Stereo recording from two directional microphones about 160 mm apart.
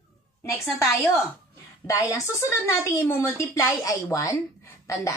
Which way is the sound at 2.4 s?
20° left (ahead or behind).